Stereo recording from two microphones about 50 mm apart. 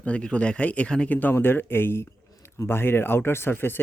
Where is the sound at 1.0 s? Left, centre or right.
Left.